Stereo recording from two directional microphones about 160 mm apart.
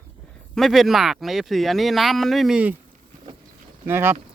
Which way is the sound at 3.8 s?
15° right (ahead or behind).